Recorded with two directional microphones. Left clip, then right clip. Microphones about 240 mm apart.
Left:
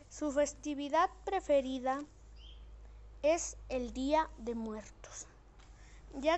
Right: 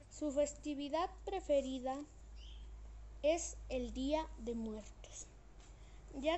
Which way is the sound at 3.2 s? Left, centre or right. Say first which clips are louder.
Left 4 dB; centre.